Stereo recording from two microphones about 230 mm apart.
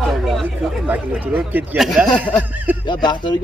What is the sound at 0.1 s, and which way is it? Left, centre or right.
Speech, centre.